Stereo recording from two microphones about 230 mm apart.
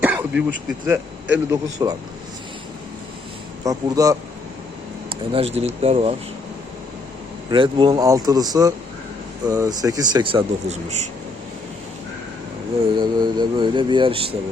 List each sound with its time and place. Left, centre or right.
0.0 s a sound: centre
0.9 s speech: centre
3.6 s speech: centre
5.3 s speech: right
7.5 s speech: right
13.0 s speech: centre